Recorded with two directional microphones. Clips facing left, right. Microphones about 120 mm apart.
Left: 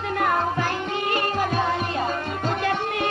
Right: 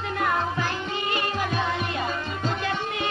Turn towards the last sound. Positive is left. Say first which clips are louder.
# left 4 dB
turn(degrees=55)  # may be behind; listen again after turning